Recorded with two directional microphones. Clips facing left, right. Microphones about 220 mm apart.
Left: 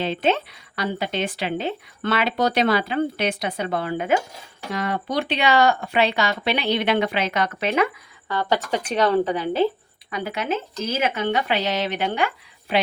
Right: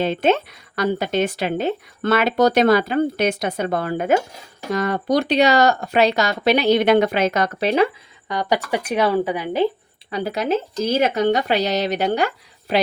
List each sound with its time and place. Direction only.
0.0 s speech: 45° right (ahead or behind)
8.3 s speech: 15° right (ahead or behind)
10.1 s speech: 35° right (ahead or behind)